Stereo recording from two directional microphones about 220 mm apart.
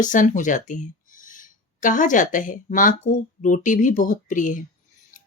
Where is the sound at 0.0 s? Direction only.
35° left (ahead or behind).